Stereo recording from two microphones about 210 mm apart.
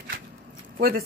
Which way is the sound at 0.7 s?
40° right (ahead or behind).